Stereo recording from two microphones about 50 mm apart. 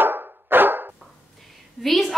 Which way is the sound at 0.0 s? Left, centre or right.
Right.